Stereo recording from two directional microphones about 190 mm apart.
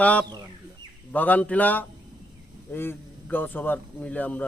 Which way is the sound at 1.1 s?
10° left (ahead or behind).